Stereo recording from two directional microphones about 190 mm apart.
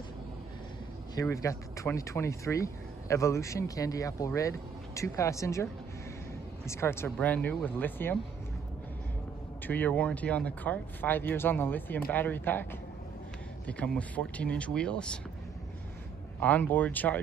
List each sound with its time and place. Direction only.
1.3 s speech: 15° left (ahead or behind)
9.7 s speech: 10° left (ahead or behind)
13.7 s speech: 5° left (ahead or behind)
16.3 s speech: 10° left (ahead or behind)